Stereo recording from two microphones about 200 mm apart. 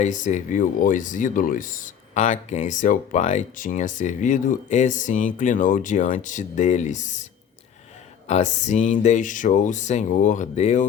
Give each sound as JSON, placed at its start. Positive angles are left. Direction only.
{"t": 0.0, "sound": "speech", "side_deg": 35}
{"t": 8.3, "sound": "speech", "side_deg": 35}